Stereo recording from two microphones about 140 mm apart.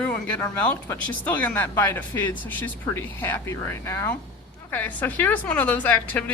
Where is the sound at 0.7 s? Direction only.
10° left (ahead or behind).